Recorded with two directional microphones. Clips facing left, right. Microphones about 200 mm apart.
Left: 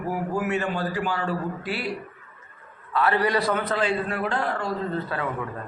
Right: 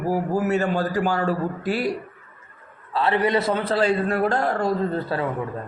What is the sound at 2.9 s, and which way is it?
A man's voice, 25° right (ahead or behind).